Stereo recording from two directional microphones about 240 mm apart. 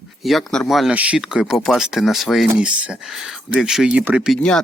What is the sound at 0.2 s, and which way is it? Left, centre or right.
Speech, centre.